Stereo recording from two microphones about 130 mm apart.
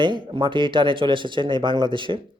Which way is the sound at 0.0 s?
35° right (ahead or behind).